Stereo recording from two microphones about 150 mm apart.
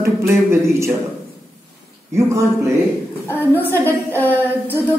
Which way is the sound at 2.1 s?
20° right (ahead or behind).